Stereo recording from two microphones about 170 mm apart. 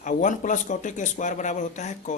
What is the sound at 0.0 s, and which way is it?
A man's voice, 50° left (ahead or behind).